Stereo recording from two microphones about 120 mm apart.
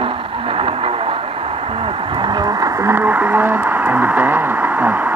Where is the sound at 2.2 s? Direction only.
35° right (ahead or behind).